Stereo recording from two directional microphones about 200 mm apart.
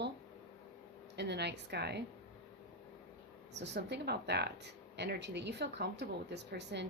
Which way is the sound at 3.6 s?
55° right (ahead or behind).